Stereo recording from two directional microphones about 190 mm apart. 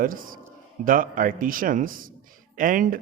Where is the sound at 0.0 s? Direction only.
45° right (ahead or behind).